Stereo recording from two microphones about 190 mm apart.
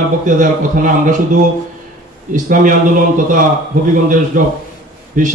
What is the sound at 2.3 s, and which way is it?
Speech, 45° right (ahead or behind).